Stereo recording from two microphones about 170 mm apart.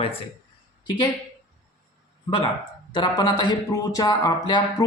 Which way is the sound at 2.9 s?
25° left (ahead or behind).